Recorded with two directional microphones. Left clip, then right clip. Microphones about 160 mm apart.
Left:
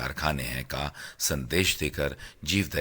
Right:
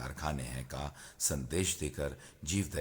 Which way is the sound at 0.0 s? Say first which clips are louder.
Left 10 dB; 20° left (ahead or behind).